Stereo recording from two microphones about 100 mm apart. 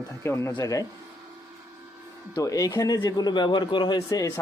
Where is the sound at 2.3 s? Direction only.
35° left (ahead or behind).